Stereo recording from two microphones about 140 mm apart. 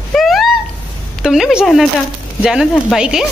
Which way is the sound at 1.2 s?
5° right (ahead or behind).